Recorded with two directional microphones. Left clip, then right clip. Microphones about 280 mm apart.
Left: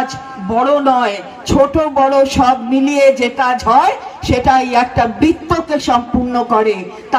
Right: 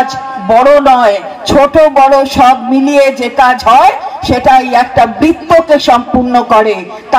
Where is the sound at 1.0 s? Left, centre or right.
Centre.